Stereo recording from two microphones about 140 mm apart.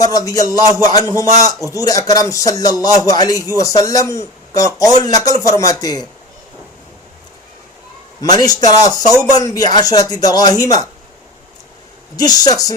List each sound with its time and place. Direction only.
0.0 s a man's voice: 25° left (ahead or behind)
8.2 s a man's voice: 30° left (ahead or behind)
12.1 s a man's voice: 30° left (ahead or behind)